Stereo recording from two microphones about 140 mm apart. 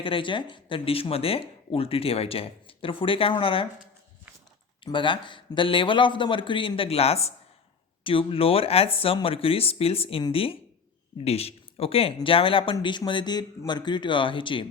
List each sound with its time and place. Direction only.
0.0 s speech: 40° left (ahead or behind)
4.8 s speech: 35° left (ahead or behind)